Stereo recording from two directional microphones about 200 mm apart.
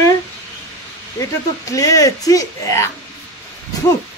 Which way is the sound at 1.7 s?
15° left (ahead or behind).